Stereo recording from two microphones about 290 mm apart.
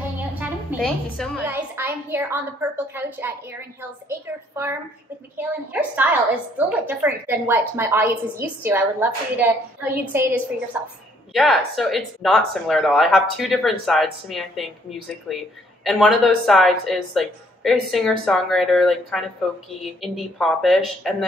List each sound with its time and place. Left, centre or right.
0.4 s a woman's voice: centre